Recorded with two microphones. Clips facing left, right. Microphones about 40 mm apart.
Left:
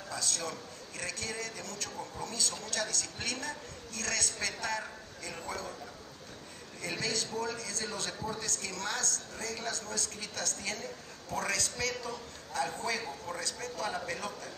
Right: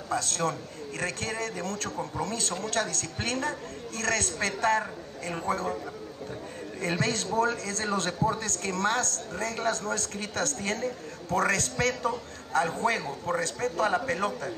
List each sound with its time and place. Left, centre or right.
0.1 s a man's voice: right
6.8 s a man's voice: right